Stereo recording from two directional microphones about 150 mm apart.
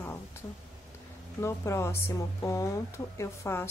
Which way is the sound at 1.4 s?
20° left (ahead or behind).